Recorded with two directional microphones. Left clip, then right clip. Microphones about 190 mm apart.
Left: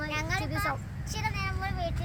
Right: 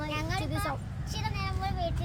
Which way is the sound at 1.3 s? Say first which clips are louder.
Left 1 dB; 5° right (ahead or behind).